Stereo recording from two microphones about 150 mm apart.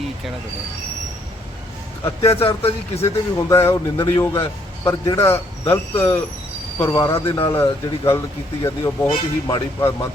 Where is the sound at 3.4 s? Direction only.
20° left (ahead or behind).